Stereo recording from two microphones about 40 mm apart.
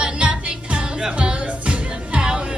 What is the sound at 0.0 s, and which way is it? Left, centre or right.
Music, right.